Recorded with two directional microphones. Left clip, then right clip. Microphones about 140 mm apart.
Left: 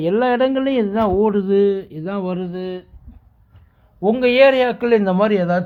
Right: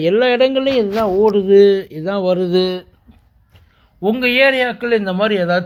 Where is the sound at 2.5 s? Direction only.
55° right (ahead or behind).